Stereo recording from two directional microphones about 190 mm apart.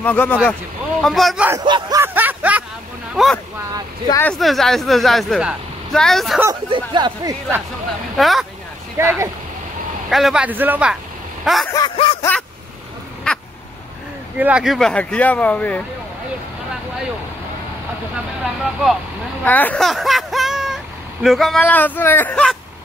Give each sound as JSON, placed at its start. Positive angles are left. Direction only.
{"t": 0.0, "sound": "speech", "side_deg": 10}
{"t": 1.6, "sound": "a sound", "side_deg": -20}
{"t": 3.2, "sound": "speech", "side_deg": 0}
{"t": 6.7, "sound": "speech", "side_deg": -25}
{"t": 8.2, "sound": "speech", "side_deg": 0}
{"t": 9.0, "sound": "speech", "side_deg": -15}
{"t": 10.0, "sound": "speech", "side_deg": 0}
{"t": 11.7, "sound": "snicker", "side_deg": 25}
{"t": 13.3, "sound": "crow", "side_deg": 5}
{"t": 14.4, "sound": "speech", "side_deg": -5}
{"t": 18.4, "sound": "speech", "side_deg": 0}
{"t": 19.4, "sound": "speech", "side_deg": 10}